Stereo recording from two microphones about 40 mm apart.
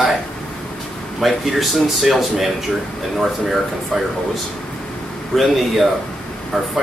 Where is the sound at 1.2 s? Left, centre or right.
Centre.